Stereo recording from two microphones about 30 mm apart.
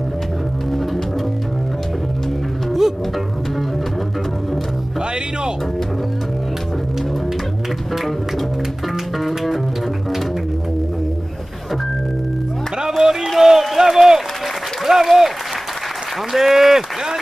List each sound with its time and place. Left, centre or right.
9.2 s music: centre
12.7 s music: centre
13.4 s a sound: centre
14.9 s applause: centre
16.3 s speech: centre